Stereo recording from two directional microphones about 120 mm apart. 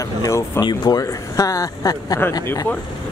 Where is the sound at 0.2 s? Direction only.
30° left (ahead or behind).